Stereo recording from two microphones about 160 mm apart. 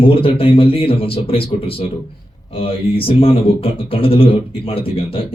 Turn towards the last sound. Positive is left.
turn(degrees=35)  # may be behind; listen again after turning